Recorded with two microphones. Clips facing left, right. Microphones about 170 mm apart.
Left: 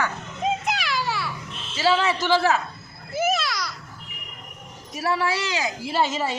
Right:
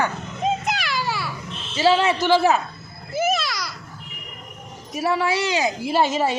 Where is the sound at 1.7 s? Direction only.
25° right (ahead or behind).